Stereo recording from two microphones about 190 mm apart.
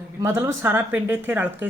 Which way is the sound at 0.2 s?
15° right (ahead or behind).